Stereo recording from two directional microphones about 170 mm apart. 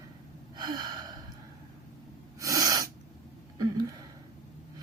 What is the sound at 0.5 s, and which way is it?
Gasp, 25° right (ahead or behind).